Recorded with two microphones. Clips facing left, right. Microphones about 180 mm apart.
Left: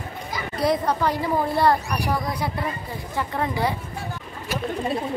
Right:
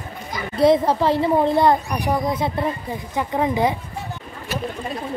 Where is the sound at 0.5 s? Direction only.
25° right (ahead or behind).